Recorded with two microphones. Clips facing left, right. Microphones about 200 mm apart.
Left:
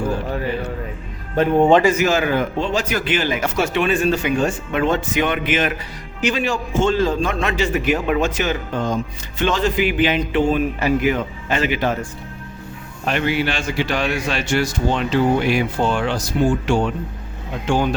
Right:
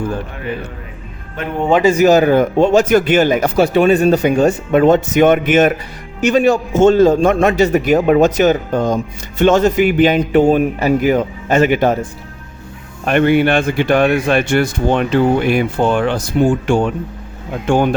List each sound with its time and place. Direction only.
1.4 s speech: 35° left (ahead or behind)
1.8 s a man's voice: 35° right (ahead or behind)
13.1 s a man's voice: 55° right (ahead or behind)